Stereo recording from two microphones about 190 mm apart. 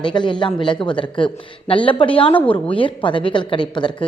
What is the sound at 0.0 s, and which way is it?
Speech, 25° left (ahead or behind).